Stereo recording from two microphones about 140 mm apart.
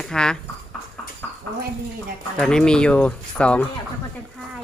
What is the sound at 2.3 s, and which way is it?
A woman's voice, 5° left (ahead or behind).